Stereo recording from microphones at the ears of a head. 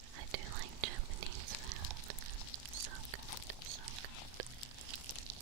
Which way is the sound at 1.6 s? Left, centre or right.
Right.